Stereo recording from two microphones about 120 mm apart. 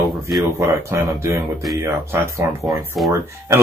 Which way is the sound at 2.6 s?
Centre (ahead or behind).